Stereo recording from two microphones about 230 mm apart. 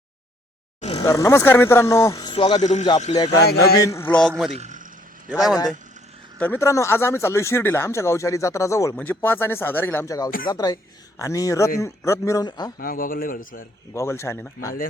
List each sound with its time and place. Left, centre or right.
0.8 s vehicle: left
1.0 s speech: centre
3.3 s speech: left
3.8 s speech: centre
4.5 s a sound: right
5.3 s speech: centre
6.4 s speech: centre
12.8 s speech: left
13.9 s speech: centre